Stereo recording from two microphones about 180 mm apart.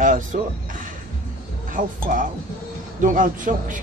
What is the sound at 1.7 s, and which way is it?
Speech, 50° right (ahead or behind).